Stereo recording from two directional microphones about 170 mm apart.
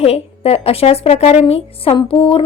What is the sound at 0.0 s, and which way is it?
Speech, 35° left (ahead or behind).